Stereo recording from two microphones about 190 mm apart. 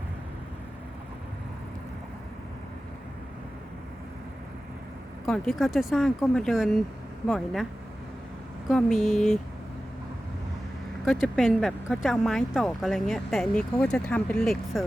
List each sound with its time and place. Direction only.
5.2 s speech: centre (ahead or behind)
8.7 s speech: centre (ahead or behind)
11.0 s speech: centre (ahead or behind)